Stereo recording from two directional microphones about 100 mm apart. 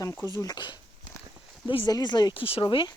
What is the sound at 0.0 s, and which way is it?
Speech, 25° left (ahead or behind).